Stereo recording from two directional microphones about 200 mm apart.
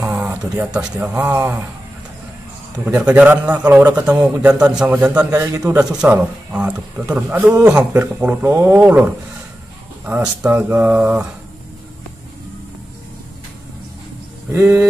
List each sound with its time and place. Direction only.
0.0 s a sound: 10° right (ahead or behind)
0.7 s a man's voice: 5° right (ahead or behind)
2.8 s a man's voice: 5° right (ahead or behind)
5.3 s a man's voice: 15° right (ahead or behind)
14.5 s a man's voice: 15° right (ahead or behind)